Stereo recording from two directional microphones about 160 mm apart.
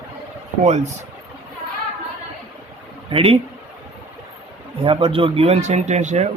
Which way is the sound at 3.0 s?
35° right (ahead or behind).